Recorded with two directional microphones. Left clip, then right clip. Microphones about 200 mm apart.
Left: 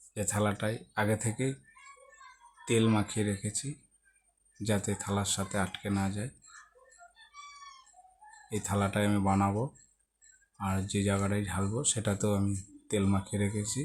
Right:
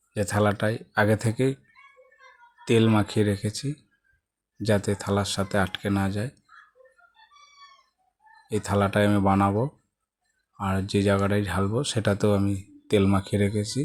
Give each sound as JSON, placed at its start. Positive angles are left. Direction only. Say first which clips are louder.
{"t": 0.1, "sound": "speech", "louder": "right 8 dB", "side_deg": -25}
{"t": 2.6, "sound": "speech", "louder": "right 7 dB", "side_deg": -30}
{"t": 8.4, "sound": "speech", "louder": "right 8 dB", "side_deg": -25}